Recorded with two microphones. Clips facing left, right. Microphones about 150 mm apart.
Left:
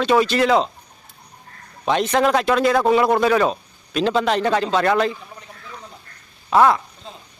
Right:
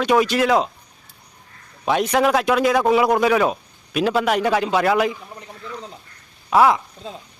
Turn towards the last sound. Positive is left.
turn(degrees=-10)  # may be behind; listen again after turning